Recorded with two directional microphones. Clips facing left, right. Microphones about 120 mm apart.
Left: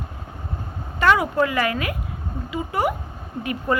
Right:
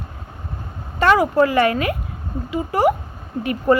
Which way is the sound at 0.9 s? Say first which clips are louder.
Right 4 dB; 35° right (ahead or behind).